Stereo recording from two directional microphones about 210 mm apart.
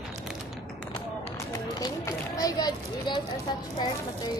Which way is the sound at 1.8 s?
15° left (ahead or behind).